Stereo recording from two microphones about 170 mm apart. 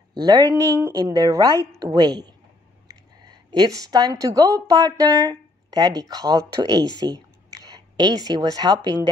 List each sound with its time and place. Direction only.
0.1 s a woman's voice: 25° right (ahead or behind)